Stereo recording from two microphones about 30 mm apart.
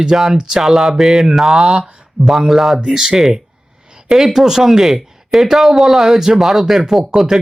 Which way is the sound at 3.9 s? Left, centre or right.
Right.